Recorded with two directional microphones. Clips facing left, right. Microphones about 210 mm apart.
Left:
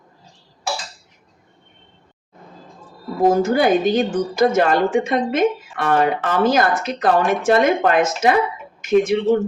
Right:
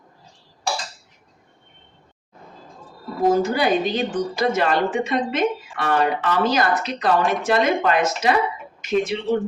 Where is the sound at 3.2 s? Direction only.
50° left (ahead or behind).